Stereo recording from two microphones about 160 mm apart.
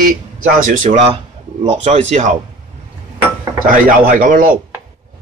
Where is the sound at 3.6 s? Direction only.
55° right (ahead or behind).